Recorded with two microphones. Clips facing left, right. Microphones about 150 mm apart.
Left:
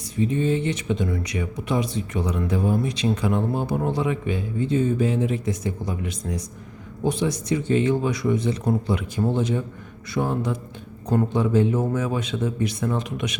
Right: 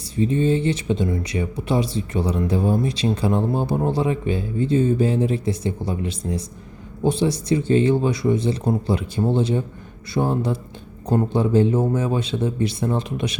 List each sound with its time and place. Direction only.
0.0 s speech: 30° right (ahead or behind)